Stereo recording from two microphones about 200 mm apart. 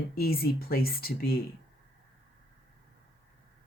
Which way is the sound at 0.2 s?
50° left (ahead or behind).